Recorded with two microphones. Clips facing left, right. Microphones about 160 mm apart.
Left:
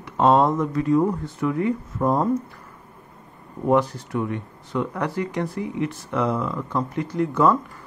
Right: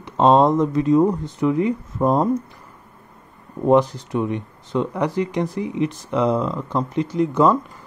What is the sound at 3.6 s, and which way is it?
Speech, 20° right (ahead or behind).